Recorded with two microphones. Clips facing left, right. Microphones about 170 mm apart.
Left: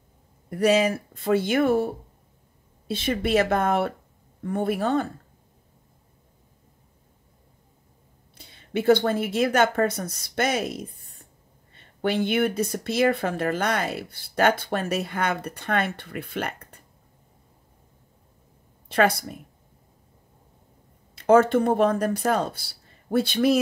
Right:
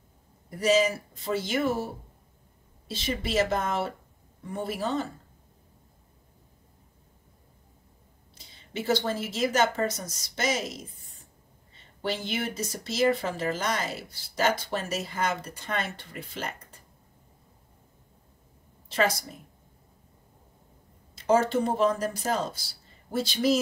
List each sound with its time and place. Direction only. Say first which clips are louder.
0.5 s speech: left 3 dB; 60° left (ahead or behind)
2.9 s speech: left 7 dB; 55° left (ahead or behind)
8.4 s speech: left 7 dB; 60° left (ahead or behind)
18.9 s a woman's voice: left 5 dB; 60° left (ahead or behind)
21.1 s speech: left 6 dB; 60° left (ahead or behind)